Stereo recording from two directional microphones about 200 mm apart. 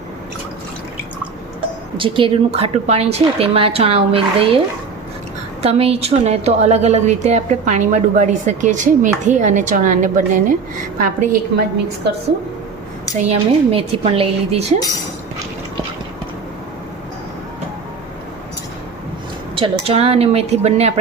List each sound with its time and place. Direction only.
2.0 s a woman's voice: 25° right (ahead or behind)
5.6 s a woman's voice: 30° right (ahead or behind)
13.1 s a woman's voice: 30° right (ahead or behind)
19.5 s a woman's voice: 30° right (ahead or behind)